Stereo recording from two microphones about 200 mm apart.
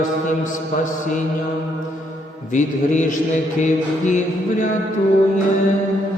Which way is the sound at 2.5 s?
40° left (ahead or behind).